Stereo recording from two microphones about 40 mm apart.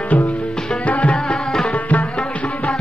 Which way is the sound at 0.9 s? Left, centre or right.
Left.